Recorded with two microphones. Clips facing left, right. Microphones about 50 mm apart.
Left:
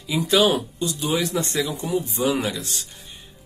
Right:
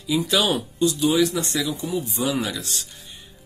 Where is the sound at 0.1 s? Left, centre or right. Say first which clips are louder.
Left 2 dB; left.